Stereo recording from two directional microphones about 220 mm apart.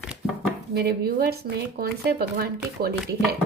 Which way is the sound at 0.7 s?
45° right (ahead or behind).